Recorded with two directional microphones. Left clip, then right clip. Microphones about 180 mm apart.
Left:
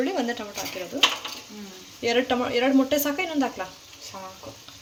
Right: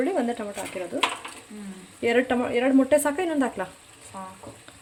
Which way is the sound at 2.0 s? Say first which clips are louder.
Right 1 dB; 20° right (ahead or behind).